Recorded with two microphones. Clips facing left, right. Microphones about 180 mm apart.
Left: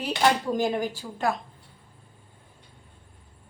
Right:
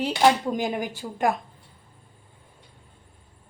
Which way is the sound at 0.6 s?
15° right (ahead or behind).